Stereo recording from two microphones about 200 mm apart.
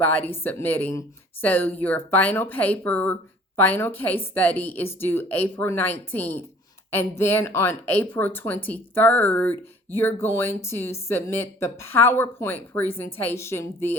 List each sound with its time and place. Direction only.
0.0 s a woman's voice: 10° left (ahead or behind)